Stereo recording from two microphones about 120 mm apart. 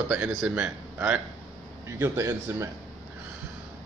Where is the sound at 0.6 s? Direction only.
15° right (ahead or behind).